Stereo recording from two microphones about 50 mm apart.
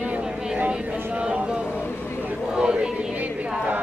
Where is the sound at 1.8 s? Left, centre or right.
Left.